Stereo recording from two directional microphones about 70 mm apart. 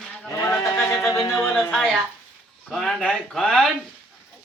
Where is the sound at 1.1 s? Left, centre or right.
Left.